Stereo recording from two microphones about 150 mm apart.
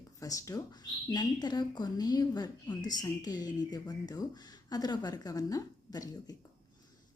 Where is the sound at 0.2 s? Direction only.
20° left (ahead or behind).